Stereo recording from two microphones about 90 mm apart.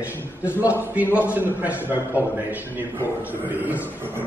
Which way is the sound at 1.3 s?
20° right (ahead or behind).